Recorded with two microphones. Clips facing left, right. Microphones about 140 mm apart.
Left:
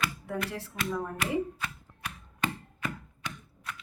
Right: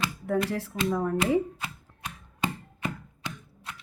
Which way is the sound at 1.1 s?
25° right (ahead or behind).